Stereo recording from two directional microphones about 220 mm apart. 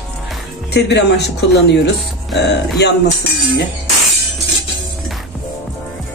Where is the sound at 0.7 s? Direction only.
50° left (ahead or behind).